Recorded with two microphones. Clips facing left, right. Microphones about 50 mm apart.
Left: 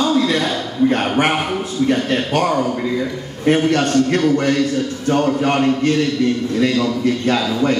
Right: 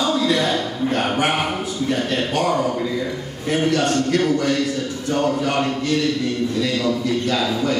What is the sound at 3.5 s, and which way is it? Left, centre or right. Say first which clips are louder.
Speech: left 4 dB; left.